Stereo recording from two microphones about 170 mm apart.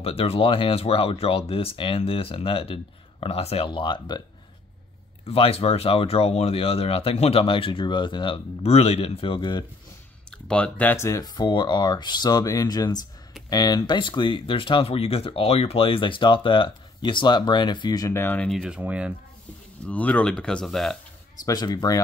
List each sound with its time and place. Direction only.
0.0 s speech: 35° left (ahead or behind)
5.2 s speech: 35° left (ahead or behind)
10.3 s speech: 5° left (ahead or behind)
18.5 s speech: 5° right (ahead or behind)
19.9 s speech: 10° left (ahead or behind)
21.5 s speech: 25° left (ahead or behind)